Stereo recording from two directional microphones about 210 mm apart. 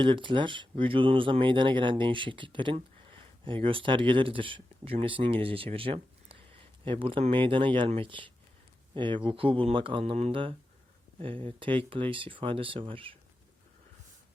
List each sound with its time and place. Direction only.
0.0 s speech: 25° right (ahead or behind)